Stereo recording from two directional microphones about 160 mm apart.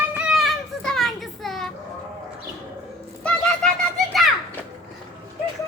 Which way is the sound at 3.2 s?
5° left (ahead or behind).